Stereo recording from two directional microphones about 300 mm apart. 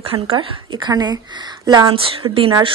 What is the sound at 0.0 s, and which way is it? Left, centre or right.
A woman's voice, centre.